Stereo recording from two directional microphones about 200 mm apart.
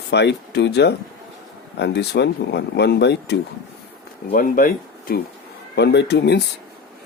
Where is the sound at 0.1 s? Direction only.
55° left (ahead or behind).